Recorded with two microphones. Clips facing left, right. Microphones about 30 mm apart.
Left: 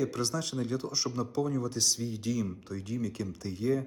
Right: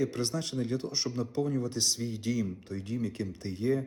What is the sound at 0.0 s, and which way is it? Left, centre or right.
Speech, centre.